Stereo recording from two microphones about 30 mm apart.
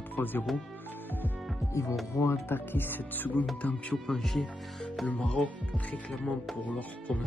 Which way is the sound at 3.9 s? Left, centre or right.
Centre.